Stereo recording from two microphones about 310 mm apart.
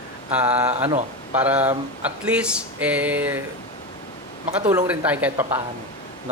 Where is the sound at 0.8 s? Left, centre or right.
Right.